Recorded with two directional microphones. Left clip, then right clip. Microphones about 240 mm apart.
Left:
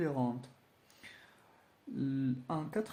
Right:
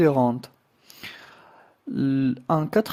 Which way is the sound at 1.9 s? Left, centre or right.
Right.